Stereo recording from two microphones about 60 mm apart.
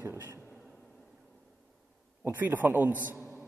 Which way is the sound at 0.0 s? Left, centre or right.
Right.